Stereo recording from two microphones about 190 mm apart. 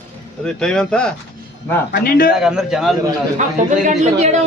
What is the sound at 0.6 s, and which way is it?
Speech, 5° left (ahead or behind).